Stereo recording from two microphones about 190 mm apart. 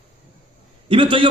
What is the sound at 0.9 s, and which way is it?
Speech, 25° right (ahead or behind).